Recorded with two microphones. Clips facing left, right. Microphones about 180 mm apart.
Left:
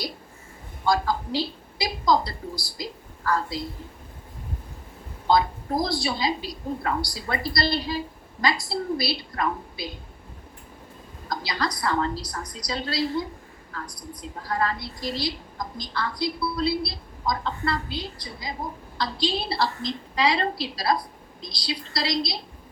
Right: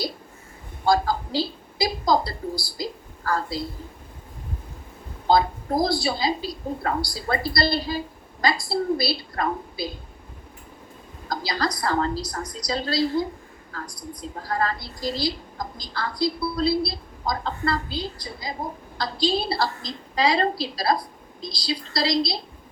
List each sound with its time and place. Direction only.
0.9 s a woman's voice: 35° right (ahead or behind)
5.8 s a woman's voice: 30° right (ahead or behind)
11.3 s a woman's voice: 35° right (ahead or behind)
14.3 s a woman's voice: 40° right (ahead or behind)